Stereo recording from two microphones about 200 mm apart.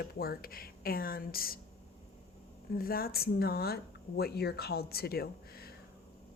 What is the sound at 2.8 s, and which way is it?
Speech, 50° left (ahead or behind).